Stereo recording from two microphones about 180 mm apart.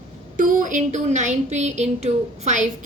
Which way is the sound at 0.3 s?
45° right (ahead or behind).